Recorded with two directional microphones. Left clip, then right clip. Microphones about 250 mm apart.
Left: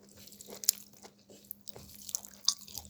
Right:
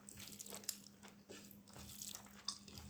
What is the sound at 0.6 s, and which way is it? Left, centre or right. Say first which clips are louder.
Crunch: left 19 dB; left.